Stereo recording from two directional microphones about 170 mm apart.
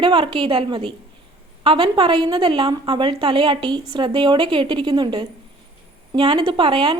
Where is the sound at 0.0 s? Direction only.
30° right (ahead or behind).